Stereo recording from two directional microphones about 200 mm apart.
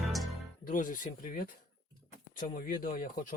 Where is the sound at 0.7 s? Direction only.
40° left (ahead or behind).